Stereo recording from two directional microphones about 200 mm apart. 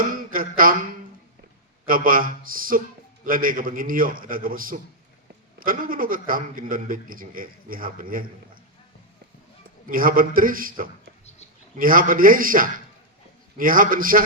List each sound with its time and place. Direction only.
0.1 s a sound: 45° right (ahead or behind)
1.9 s a man's voice: 45° right (ahead or behind)
9.8 s a man's voice: 45° right (ahead or behind)